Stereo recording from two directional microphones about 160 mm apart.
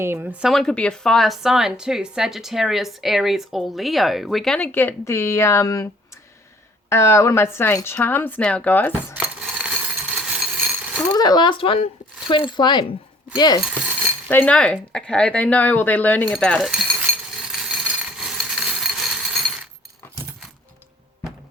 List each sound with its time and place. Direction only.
0.0 s a woman's voice: 15° right (ahead or behind); by 5.9 s 20° left (ahead or behind)
6.9 s speech: 15° left (ahead or behind)
9.1 s a sound: 5° right (ahead or behind)
11.1 s speech: 25° left (ahead or behind)
14.3 s speech: 10° left (ahead or behind)
17.5 s a sound: 5° right (ahead or behind)